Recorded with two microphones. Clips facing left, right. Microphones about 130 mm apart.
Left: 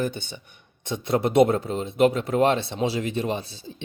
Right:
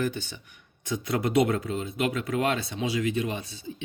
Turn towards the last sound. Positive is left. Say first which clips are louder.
# left 4 dB
turn(degrees=30)  # may be behind; listen again after turning